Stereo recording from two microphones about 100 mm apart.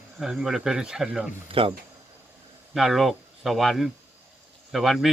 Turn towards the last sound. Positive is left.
turn(degrees=0)  # may be behind; listen again after turning